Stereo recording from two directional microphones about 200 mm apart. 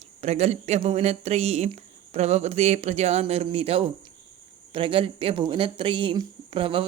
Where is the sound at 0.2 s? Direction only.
30° right (ahead or behind).